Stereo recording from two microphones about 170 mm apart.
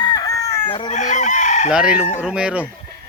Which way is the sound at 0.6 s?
30° left (ahead or behind).